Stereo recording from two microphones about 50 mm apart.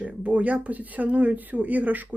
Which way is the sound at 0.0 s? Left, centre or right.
Right.